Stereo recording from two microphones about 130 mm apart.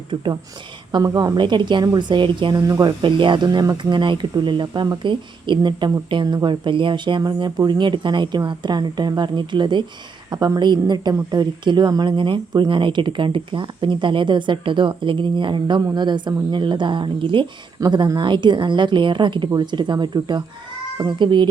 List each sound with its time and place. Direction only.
0.1 s speech: 35° right (ahead or behind)
2.6 s speech: 25° right (ahead or behind)
3.0 s speech: 40° right (ahead or behind)